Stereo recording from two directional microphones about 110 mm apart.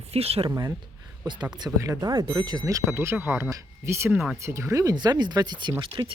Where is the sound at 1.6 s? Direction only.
30° right (ahead or behind).